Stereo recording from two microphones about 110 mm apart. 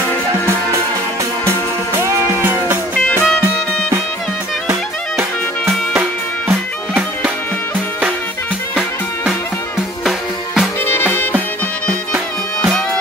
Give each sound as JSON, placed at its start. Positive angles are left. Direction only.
{"t": 2.0, "sound": "music", "side_deg": -20}
{"t": 3.0, "sound": "music", "side_deg": 15}
{"t": 6.9, "sound": "music", "side_deg": -10}
{"t": 10.0, "sound": "music", "side_deg": 0}
{"t": 10.9, "sound": "music", "side_deg": 20}